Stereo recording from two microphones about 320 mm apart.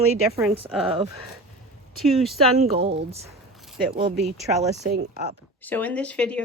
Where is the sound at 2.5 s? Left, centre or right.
Centre.